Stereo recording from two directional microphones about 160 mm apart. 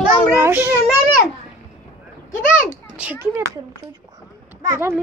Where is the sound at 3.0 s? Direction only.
10° right (ahead or behind).